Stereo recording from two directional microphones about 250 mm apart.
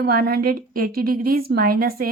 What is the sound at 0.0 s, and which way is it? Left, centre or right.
A woman's voice, right.